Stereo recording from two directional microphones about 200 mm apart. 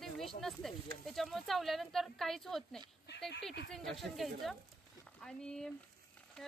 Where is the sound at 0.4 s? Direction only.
Centre (ahead or behind).